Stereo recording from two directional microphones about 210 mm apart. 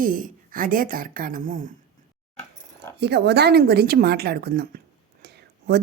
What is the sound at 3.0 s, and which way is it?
A woman's voice, 50° right (ahead or behind).